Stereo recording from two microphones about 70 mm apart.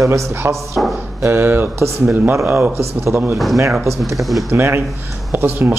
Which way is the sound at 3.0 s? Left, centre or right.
Right.